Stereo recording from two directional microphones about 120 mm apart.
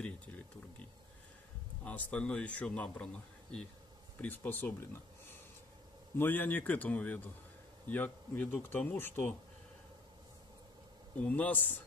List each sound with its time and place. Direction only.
0.0 s a sound: 10° left (ahead or behind)
1.9 s speech: 10° left (ahead or behind)
4.2 s speech: 15° left (ahead or behind)
11.1 s speech: 10° left (ahead or behind)